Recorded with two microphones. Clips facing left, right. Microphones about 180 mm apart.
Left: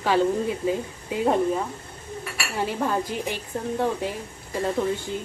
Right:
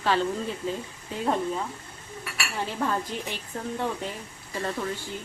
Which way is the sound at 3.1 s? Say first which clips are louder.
Left 4 dB; 10° left (ahead or behind).